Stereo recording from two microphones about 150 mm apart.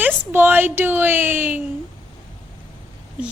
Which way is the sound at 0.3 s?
15° right (ahead or behind).